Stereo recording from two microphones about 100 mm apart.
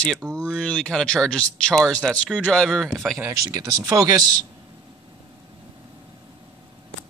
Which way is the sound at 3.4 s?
35° right (ahead or behind).